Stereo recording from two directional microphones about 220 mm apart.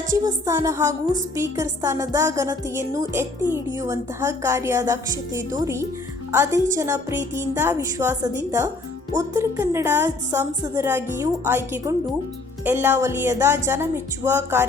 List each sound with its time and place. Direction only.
0.1 s a woman's voice: 15° right (ahead or behind)